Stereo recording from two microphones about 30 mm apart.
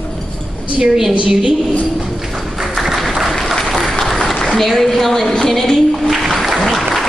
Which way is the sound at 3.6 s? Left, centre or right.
Centre.